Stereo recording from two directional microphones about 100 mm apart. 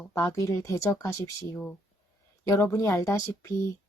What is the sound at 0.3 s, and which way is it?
A woman's voice, 30° left (ahead or behind).